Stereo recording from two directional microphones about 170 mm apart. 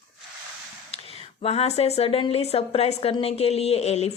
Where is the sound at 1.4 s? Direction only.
35° left (ahead or behind).